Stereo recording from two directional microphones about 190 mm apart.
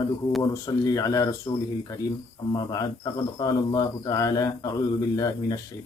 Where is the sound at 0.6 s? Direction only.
20° left (ahead or behind).